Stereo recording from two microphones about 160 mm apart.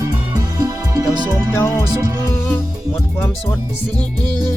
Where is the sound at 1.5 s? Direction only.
15° left (ahead or behind).